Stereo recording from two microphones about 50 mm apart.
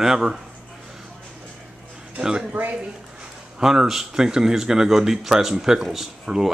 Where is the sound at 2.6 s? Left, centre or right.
Right.